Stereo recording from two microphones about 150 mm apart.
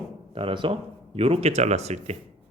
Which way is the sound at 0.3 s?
35° right (ahead or behind).